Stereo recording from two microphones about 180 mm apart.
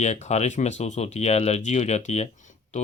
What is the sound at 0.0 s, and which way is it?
Speech, 40° left (ahead or behind).